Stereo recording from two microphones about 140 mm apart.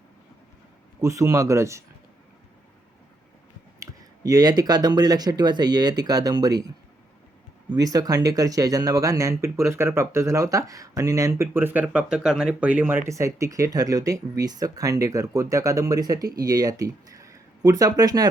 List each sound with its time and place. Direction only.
1.0 s speech: 20° right (ahead or behind)
3.8 s speech: 25° right (ahead or behind)
7.7 s speech: 25° right (ahead or behind)